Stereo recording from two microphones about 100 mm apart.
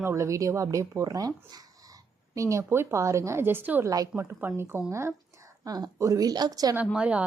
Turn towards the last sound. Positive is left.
turn(degrees=-10)  # may be behind; listen again after turning